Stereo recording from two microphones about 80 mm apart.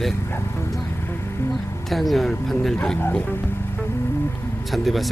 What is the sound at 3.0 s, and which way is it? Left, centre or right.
Speech, left.